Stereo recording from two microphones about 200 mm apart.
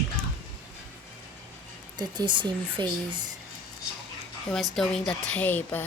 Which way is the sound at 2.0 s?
20° right (ahead or behind).